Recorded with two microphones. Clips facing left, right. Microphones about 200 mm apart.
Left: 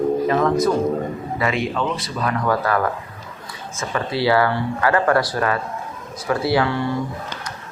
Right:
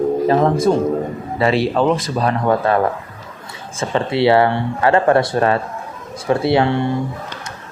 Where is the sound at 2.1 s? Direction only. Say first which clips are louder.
Right 4 dB; 30° right (ahead or behind).